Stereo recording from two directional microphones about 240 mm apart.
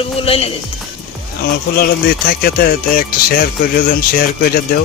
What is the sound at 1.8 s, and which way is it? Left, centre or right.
Speech, left.